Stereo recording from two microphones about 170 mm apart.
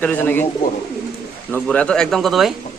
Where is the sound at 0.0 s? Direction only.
10° left (ahead or behind).